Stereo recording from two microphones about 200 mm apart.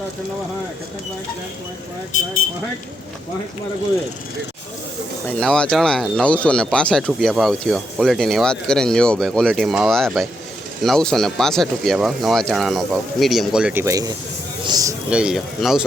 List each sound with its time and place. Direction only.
5.4 s speech: 5° left (ahead or behind); by 14.9 s 20° right (ahead or behind)
15.1 s speech: 5° right (ahead or behind)